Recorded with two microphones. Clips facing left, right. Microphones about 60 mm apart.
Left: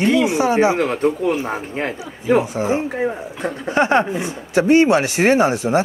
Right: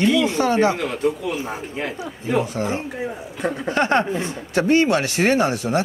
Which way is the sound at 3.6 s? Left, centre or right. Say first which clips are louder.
Left 4 dB; centre.